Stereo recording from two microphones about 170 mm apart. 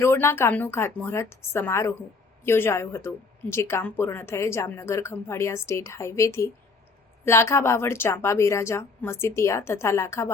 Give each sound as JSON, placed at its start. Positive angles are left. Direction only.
{"t": 0.0, "sound": "a woman's voice", "side_deg": 15}